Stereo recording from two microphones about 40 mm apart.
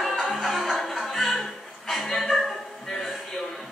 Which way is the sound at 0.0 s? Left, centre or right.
Centre.